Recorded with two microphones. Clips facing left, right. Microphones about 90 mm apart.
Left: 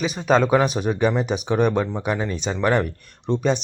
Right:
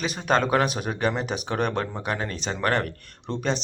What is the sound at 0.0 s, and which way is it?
Speech, centre (ahead or behind).